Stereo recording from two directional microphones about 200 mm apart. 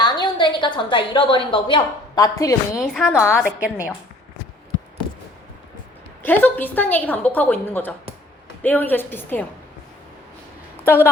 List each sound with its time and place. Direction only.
0.0 s a woman's voice: 20° left (ahead or behind)
2.7 s a woman's voice: centre (ahead or behind)
6.2 s a woman's voice: 10° left (ahead or behind)
10.8 s a woman's voice: 10° left (ahead or behind)